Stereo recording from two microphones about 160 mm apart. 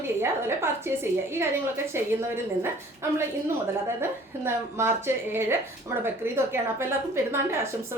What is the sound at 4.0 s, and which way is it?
A woman's voice, 15° right (ahead or behind).